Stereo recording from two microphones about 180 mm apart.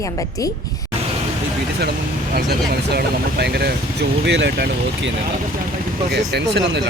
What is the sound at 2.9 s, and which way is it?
Speech, 60° right (ahead or behind).